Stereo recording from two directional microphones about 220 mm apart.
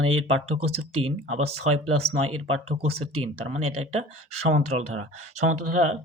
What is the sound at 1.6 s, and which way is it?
Speech, 90° right.